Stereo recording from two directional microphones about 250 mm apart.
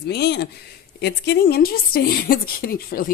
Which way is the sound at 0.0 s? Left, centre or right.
Left.